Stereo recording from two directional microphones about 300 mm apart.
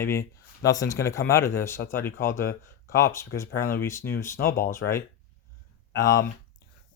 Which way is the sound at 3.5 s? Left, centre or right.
Left.